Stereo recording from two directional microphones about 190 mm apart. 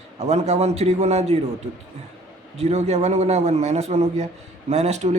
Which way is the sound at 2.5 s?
35° right (ahead or behind).